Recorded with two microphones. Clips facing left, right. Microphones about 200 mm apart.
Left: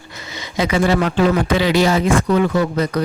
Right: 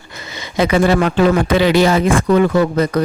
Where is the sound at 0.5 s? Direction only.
55° right (ahead or behind).